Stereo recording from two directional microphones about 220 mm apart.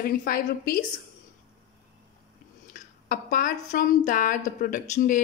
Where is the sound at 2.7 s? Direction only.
35° left (ahead or behind).